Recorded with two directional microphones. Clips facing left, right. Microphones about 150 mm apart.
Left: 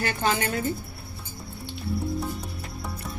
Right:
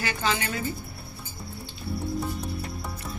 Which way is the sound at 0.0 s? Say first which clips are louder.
Left 3 dB; 50° left (ahead or behind).